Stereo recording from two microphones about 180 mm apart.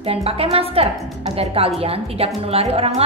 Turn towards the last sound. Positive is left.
turn(degrees=-35)  # may be behind; listen again after turning